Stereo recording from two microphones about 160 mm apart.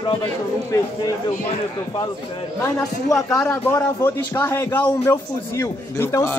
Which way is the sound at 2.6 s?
20° left (ahead or behind).